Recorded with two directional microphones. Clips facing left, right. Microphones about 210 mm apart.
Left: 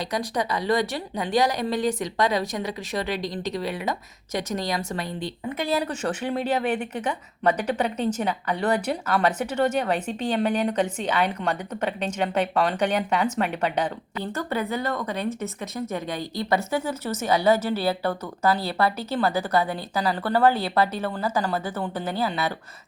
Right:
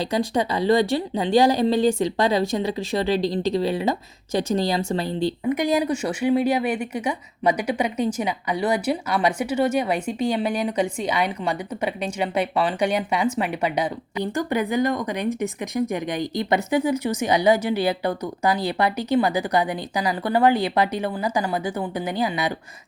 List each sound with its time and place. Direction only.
0.0 s speech: 25° right (ahead or behind)
5.5 s speech: 15° right (ahead or behind)